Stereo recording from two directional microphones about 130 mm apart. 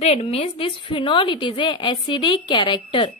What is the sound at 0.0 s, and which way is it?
A woman's voice, 55° left (ahead or behind).